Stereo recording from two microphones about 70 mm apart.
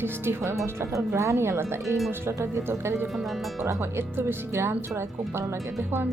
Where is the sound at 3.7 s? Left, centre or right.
Right.